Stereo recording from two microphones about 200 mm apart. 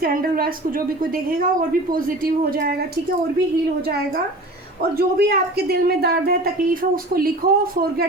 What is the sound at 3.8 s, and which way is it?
Speech, 50° right (ahead or behind).